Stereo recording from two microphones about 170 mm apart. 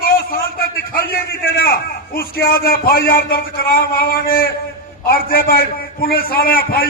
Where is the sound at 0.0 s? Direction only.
60° left (ahead or behind).